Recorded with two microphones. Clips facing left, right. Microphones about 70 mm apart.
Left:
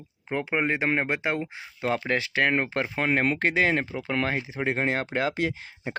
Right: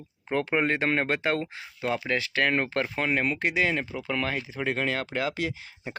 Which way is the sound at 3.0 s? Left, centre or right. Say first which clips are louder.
Left 4 dB; left.